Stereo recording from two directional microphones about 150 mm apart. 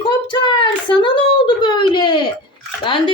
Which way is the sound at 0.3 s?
30° left (ahead or behind).